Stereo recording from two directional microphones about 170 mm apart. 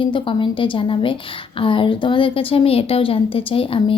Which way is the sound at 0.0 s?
30° left (ahead or behind).